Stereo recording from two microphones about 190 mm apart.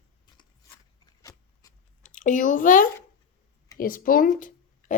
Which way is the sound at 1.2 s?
15° left (ahead or behind).